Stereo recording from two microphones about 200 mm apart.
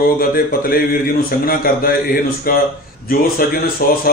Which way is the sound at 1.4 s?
45° left (ahead or behind).